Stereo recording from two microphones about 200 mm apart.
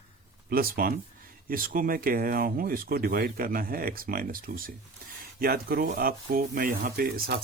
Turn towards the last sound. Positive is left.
turn(degrees=-45)  # may be behind; listen again after turning